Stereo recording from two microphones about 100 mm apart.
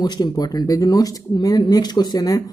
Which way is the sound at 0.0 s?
45° left (ahead or behind).